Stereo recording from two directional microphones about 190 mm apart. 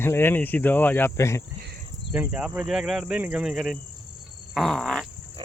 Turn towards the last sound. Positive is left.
turn(degrees=0)  # may be behind; listen again after turning